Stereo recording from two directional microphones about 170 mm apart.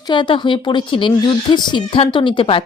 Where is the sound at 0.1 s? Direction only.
30° left (ahead or behind).